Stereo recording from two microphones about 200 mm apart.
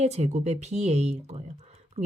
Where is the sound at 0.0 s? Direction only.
35° right (ahead or behind).